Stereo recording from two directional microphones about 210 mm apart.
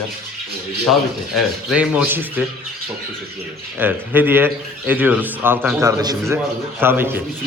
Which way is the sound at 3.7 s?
10° right (ahead or behind).